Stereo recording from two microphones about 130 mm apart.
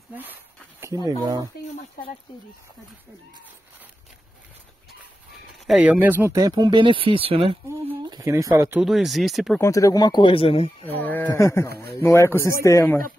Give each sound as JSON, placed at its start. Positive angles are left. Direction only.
{"t": 0.1, "sound": "speech", "side_deg": -15}
{"t": 0.7, "sound": "speech", "side_deg": -25}
{"t": 5.5, "sound": "speech", "side_deg": -5}
{"t": 8.0, "sound": "a sound", "side_deg": -35}
{"t": 8.3, "sound": "speech", "side_deg": -25}
{"t": 8.8, "sound": "speech", "side_deg": 0}
{"t": 9.6, "sound": "speech", "side_deg": 25}
{"t": 11.0, "sound": "a sound", "side_deg": 15}
{"t": 11.2, "sound": "speech", "side_deg": 25}